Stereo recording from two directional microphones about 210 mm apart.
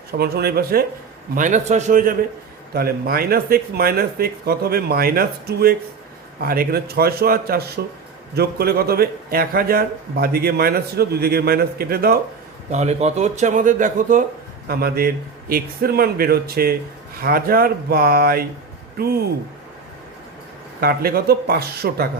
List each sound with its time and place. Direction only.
0.1 s a man's voice: 50° right (ahead or behind)
1.4 s a man's voice: 35° right (ahead or behind)
12.7 s a man's voice: 30° right (ahead or behind)
20.8 s a man's voice: 45° right (ahead or behind)